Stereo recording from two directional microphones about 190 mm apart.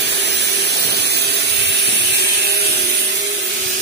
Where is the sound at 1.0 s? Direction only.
60° right (ahead or behind).